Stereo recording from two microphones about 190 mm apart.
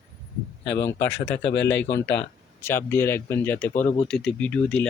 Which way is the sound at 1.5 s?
70° left (ahead or behind).